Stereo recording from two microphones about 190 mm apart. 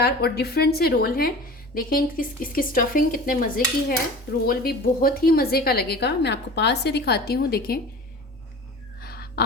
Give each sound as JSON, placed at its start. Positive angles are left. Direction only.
{"t": 0.0, "sound": "a woman's voice", "side_deg": 60}
{"t": 9.0, "sound": "whispering", "side_deg": 55}